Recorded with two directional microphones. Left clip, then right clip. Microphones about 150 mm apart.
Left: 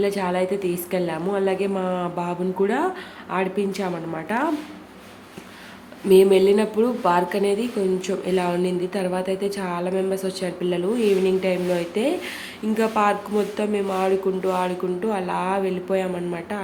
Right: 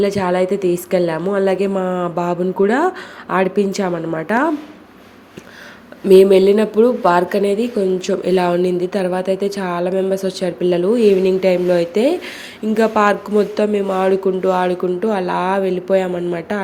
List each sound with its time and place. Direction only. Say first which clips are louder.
0.0 s speech: right 6 dB; 35° right (ahead or behind)
6.1 s speech: right 6 dB; 35° right (ahead or behind)